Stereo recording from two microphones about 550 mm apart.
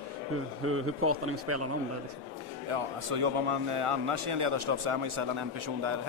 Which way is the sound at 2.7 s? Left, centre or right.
Right.